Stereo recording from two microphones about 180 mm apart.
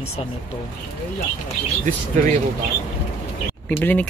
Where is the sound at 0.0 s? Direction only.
35° left (ahead or behind).